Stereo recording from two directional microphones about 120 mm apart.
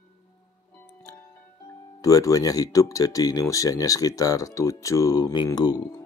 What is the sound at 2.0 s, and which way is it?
Speech, 30° left (ahead or behind).